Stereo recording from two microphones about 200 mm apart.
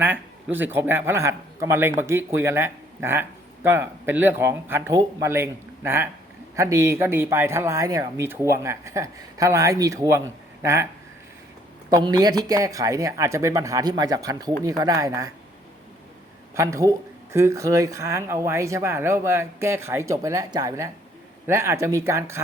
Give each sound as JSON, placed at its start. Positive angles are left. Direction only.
{"t": 0.0, "sound": "a man's voice", "side_deg": -10}
{"t": 11.9, "sound": "a man's voice", "side_deg": -20}
{"t": 16.6, "sound": "a man's voice", "side_deg": -15}